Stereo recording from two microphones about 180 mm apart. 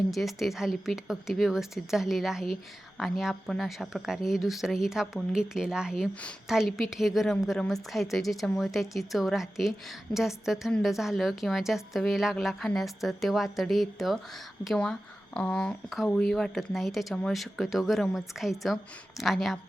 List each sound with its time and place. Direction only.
0.1 s speech: centre (ahead or behind)